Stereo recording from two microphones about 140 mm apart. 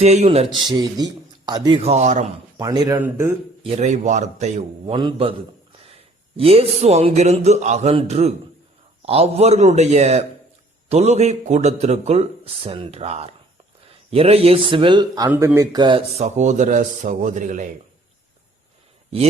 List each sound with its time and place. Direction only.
0.0 s a man's voice: 50° right (ahead or behind)
0.7 s a man's voice: 30° right (ahead or behind)
1.8 s a man's voice: 50° right (ahead or behind)
2.6 s a man's voice: 25° right (ahead or behind)
3.8 s speech: 55° right (ahead or behind)
4.9 s speech: 35° right (ahead or behind)
6.3 s a man's voice: 45° right (ahead or behind)
15.3 s speech: 15° right (ahead or behind); by 17.7 s 65° right (ahead or behind)